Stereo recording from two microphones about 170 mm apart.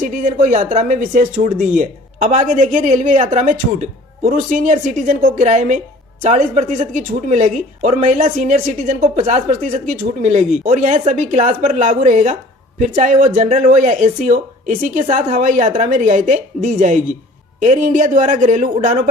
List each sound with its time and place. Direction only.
0.0 s a woman's voice: 50° right (ahead or behind)